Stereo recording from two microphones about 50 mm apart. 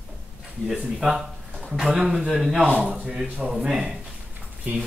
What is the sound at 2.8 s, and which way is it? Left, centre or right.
Speech, centre.